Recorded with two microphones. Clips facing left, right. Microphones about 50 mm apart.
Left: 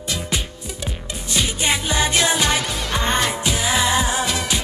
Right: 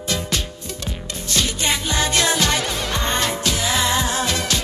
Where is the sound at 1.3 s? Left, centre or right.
Centre.